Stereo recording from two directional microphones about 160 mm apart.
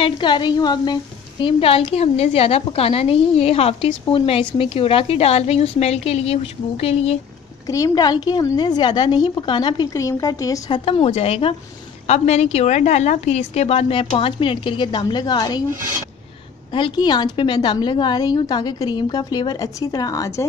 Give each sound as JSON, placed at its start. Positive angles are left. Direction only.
{"t": 0.0, "sound": "a woman's voice", "side_deg": 30}
{"t": 7.6, "sound": "a woman's voice", "side_deg": 20}
{"t": 10.9, "sound": "a woman's voice", "side_deg": 40}
{"t": 16.7, "sound": "a woman's voice", "side_deg": 30}